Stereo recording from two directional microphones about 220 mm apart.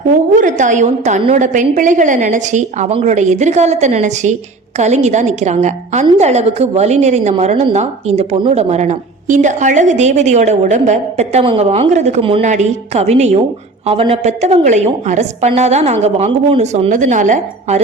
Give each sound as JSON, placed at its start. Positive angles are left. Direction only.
{"t": 0.1, "sound": "a woman's voice", "side_deg": -35}